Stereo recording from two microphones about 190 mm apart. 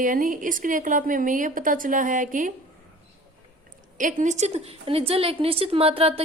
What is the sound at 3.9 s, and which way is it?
A woman's voice, 40° right (ahead or behind).